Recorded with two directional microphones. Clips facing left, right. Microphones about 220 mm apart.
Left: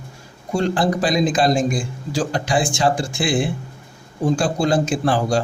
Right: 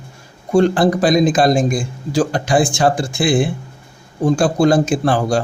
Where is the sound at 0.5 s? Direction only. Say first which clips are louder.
Right 6 dB; 55° right (ahead or behind).